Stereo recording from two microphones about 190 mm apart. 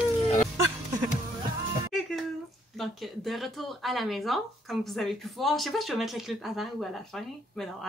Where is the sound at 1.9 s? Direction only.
5° left (ahead or behind).